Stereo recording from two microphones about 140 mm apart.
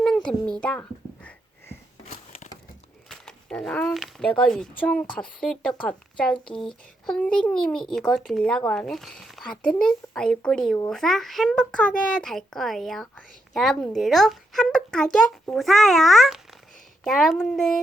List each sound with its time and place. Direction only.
0.0 s a sound: 5° left (ahead or behind)
2.0 s crushing: 55° left (ahead or behind)
3.1 s speech: 5° left (ahead or behind)